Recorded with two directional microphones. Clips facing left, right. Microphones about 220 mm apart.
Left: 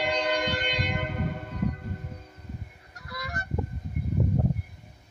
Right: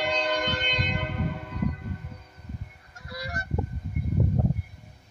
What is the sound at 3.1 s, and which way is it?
Goose, 30° right (ahead or behind).